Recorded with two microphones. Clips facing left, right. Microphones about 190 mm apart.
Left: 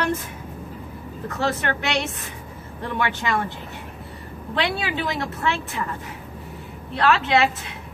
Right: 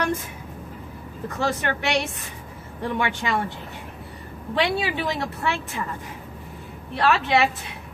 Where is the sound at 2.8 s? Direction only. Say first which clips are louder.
Even; 15° right (ahead or behind).